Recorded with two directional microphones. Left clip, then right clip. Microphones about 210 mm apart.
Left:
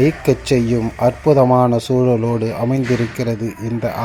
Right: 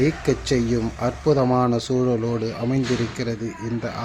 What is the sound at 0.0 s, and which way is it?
Speech, 15° left (ahead or behind).